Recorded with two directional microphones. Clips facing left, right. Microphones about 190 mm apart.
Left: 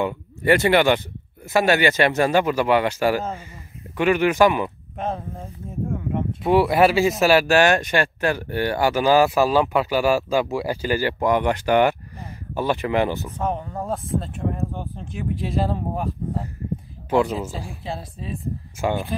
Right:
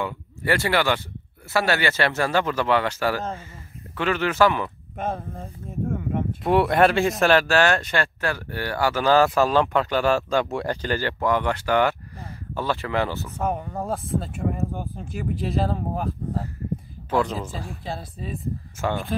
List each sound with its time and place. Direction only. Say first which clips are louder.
0.0 s speech: left 5 dB; 20° left (ahead or behind)
4.9 s speech: even; centre (ahead or behind); by 13.3 s 15° left (ahead or behind)
13.4 s speech: right 2 dB; 5° right (ahead or behind)
17.1 s speech: left 3 dB; 10° left (ahead or behind)